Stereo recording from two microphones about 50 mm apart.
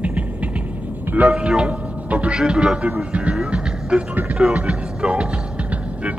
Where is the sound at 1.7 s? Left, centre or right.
Right.